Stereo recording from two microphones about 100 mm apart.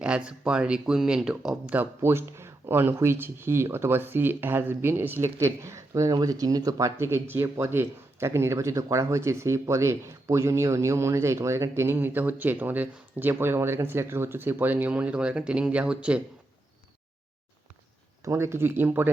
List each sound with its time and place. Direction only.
0.0 s speech: 10° right (ahead or behind)
18.3 s speech: 25° right (ahead or behind)